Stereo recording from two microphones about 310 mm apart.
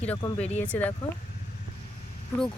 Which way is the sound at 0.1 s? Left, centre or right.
Centre.